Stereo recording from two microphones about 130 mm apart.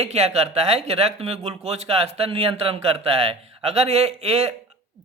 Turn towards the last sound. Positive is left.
turn(degrees=-55)  # may be behind; listen again after turning